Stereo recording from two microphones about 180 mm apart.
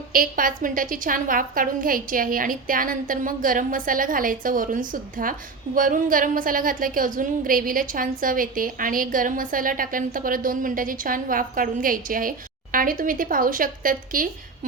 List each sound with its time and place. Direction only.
0.1 s a woman's voice: 50° right (ahead or behind)